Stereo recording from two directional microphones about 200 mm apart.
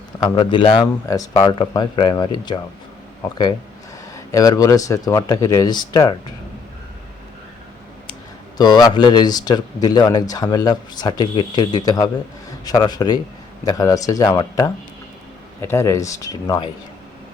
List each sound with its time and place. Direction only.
0.2 s speech: 25° left (ahead or behind)
4.1 s speech: 15° left (ahead or behind)
8.5 s speech: 20° left (ahead or behind)